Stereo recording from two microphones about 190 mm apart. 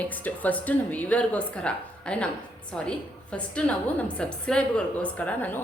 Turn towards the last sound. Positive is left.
turn(degrees=10)  # may be behind; listen again after turning